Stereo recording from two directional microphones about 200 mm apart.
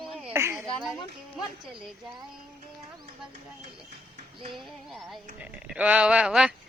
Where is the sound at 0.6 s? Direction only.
Centre (ahead or behind).